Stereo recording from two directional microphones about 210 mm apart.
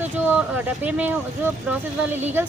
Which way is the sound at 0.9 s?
5° right (ahead or behind).